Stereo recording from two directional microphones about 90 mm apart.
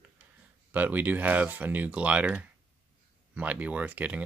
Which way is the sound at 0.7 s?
20° right (ahead or behind).